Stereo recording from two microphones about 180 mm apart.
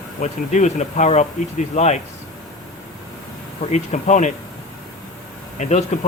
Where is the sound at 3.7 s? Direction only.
40° left (ahead or behind).